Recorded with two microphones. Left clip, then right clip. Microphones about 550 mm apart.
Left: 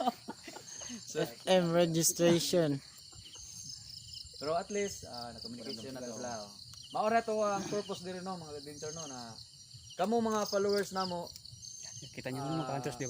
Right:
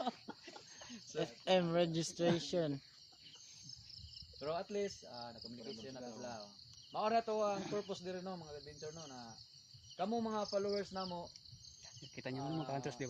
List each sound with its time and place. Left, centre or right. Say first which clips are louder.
0.0 s chicken: left 8 dB; right
1.0 s speech: left 5 dB; right
4.4 s speech: left 6 dB; right
5.8 s speech: left 7 dB; right
6.9 s speech: left 5 dB; right
8.8 s speech: left 8 dB; right
10.0 s speech: left 8 dB; right
11.8 s a sound: left 4 dB; right
12.7 s speech: left 5 dB; right